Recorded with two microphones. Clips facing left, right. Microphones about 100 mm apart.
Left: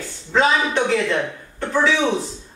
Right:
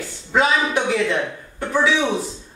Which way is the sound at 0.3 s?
5° right (ahead or behind).